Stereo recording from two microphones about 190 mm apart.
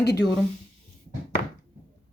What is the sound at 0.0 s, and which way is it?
Speech, 60° left (ahead or behind).